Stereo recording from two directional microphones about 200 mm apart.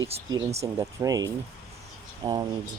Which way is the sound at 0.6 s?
15° right (ahead or behind).